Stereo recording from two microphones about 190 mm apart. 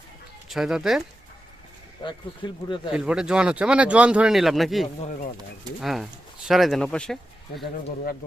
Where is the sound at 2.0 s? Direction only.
25° left (ahead or behind).